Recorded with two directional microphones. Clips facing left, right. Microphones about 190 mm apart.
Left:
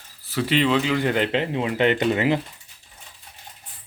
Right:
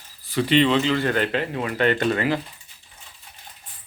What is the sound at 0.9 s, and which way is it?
Speech, 15° left (ahead or behind).